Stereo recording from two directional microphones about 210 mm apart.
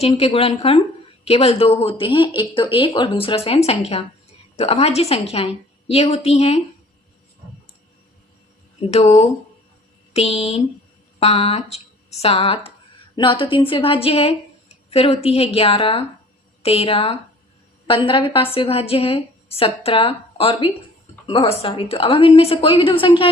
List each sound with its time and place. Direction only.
0.0 s speech: 30° left (ahead or behind)
8.8 s speech: 30° left (ahead or behind)